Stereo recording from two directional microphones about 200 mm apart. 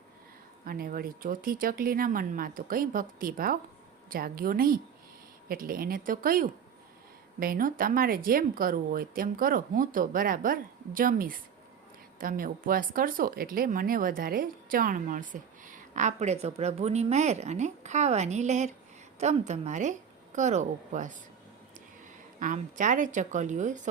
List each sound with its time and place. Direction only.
0.6 s speech: 45° right (ahead or behind)
22.4 s speech: 40° right (ahead or behind)